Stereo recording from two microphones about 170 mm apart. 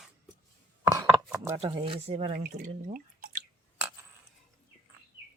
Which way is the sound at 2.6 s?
50° right (ahead or behind).